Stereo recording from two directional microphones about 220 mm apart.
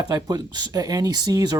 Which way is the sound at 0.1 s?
20° right (ahead or behind).